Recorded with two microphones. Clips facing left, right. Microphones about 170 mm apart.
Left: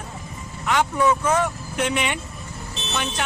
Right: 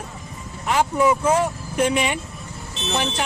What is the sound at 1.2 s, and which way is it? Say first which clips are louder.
Speech: right 2 dB; 30° right (ahead or behind).